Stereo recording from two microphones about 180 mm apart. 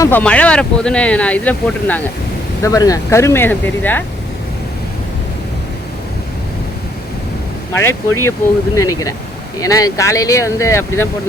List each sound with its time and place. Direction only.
0.0 s speech: 10° left (ahead or behind)
2.6 s speech: 20° left (ahead or behind)
7.8 s speech: 15° left (ahead or behind)